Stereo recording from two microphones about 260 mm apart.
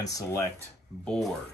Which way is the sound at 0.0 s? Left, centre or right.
Centre.